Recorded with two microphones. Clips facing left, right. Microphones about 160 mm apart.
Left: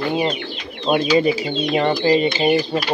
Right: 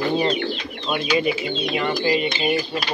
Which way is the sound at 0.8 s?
35° left (ahead or behind).